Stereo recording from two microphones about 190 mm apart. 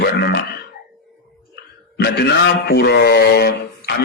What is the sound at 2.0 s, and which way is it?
A man's voice, 60° left (ahead or behind).